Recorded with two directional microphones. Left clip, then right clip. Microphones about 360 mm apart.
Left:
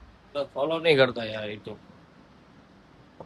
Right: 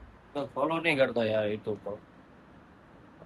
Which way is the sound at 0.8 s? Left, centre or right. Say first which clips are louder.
Left 7 dB; centre.